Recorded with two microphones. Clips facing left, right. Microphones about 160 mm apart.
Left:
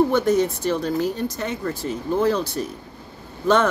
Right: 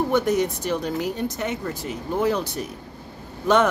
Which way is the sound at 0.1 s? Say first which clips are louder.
Left 2 dB; 15° right (ahead or behind).